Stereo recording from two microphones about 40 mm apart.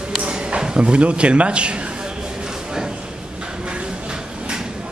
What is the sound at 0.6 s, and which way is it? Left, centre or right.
Speech, right.